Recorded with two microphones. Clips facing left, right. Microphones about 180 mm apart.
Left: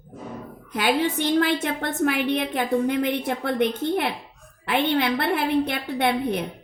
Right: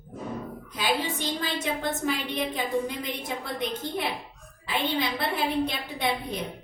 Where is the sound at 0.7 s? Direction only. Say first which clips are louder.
Left 6 dB; 65° left (ahead or behind).